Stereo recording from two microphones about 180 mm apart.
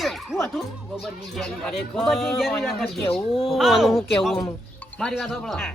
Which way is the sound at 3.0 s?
15° left (ahead or behind).